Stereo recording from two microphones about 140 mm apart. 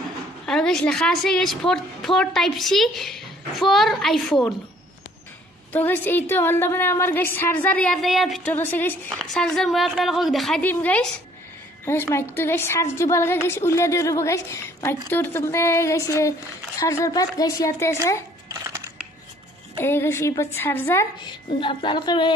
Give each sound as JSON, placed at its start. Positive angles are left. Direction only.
{"t": 0.5, "sound": "a woman's voice", "side_deg": 5}
{"t": 5.7, "sound": "a woman's voice", "side_deg": 15}
{"t": 8.5, "sound": "a woman's voice", "side_deg": 15}
{"t": 9.3, "sound": "a woman's voice", "side_deg": 5}
{"t": 10.6, "sound": "a woman's voice", "side_deg": 10}
{"t": 18.5, "sound": "a sound", "side_deg": -25}
{"t": 19.8, "sound": "a woman's voice", "side_deg": 15}
{"t": 21.3, "sound": "a woman's voice", "side_deg": 35}